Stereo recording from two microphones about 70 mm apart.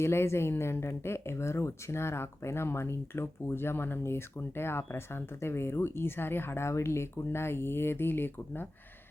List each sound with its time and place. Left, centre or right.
0.0 s speech: left